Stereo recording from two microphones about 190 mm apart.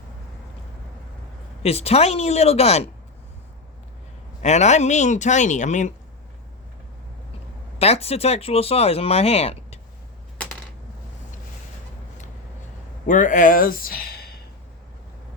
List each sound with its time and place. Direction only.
1.6 s speech: 35° left (ahead or behind)
4.4 s speech: 35° left (ahead or behind)
7.8 s speech: 35° left (ahead or behind)
13.1 s speech: 45° left (ahead or behind)